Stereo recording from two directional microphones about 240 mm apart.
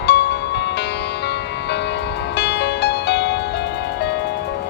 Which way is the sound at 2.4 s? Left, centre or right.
Left.